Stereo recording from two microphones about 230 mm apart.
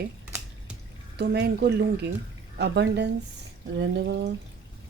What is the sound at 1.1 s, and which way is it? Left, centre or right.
Speech, right.